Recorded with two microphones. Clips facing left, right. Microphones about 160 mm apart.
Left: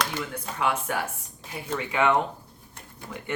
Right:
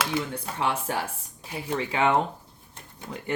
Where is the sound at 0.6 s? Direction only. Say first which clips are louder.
Left 1 dB; 30° right (ahead or behind).